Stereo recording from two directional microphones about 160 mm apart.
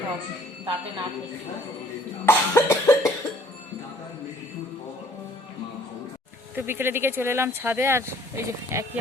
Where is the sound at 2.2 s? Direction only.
15° left (ahead or behind).